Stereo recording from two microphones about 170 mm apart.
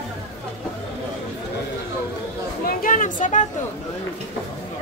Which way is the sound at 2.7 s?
50° left (ahead or behind).